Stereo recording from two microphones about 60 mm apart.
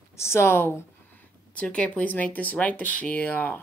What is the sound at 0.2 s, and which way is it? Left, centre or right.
Speech, left.